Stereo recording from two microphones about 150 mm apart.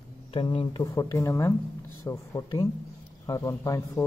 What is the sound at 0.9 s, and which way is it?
Speech, 20° left (ahead or behind).